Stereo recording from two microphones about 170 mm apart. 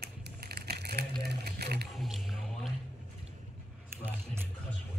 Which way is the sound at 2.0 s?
Centre (ahead or behind).